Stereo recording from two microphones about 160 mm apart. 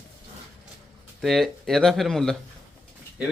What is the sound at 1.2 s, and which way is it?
Speech, centre (ahead or behind).